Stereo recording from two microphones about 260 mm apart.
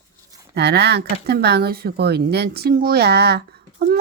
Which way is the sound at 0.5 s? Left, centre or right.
Right.